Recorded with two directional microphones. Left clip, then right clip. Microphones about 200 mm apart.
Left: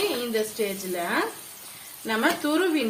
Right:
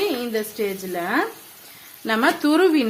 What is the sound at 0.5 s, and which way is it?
Speech, 50° right (ahead or behind).